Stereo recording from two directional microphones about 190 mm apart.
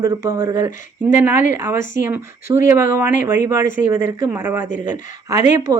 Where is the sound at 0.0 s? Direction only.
20° right (ahead or behind).